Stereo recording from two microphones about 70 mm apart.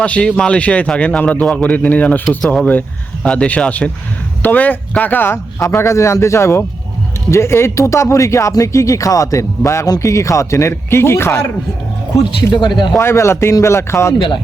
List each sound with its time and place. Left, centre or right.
0.0 s a man's voice: centre; by 11.4 s left
12.5 s speech: left
13.0 s speech: left